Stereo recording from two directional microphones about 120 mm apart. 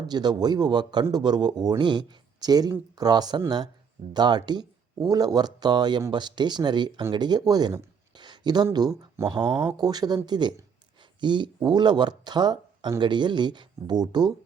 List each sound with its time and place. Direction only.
0.1 s speech: 35° right (ahead or behind)
8.1 s a sound: 40° right (ahead or behind)
9.3 s speech: 40° right (ahead or behind)